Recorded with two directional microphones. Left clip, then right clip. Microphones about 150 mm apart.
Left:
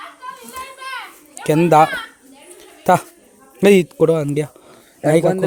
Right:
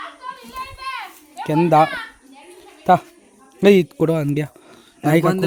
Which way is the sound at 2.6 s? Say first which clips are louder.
Left 1 dB; 25° left (ahead or behind).